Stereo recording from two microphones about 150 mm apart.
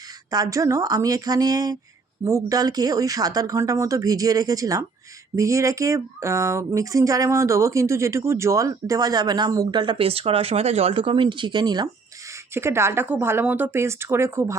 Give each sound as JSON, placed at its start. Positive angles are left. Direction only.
{"t": 0.3, "sound": "speech", "side_deg": -25}
{"t": 12.5, "sound": "speech", "side_deg": -15}